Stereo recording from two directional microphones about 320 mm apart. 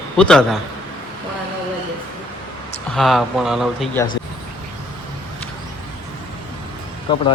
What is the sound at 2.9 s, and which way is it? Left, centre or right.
Speech, centre.